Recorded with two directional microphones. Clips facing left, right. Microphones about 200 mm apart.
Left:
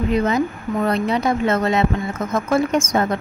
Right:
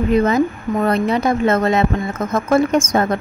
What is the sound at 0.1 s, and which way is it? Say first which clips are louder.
A woman's voice: right 5 dB; 50° right (ahead or behind).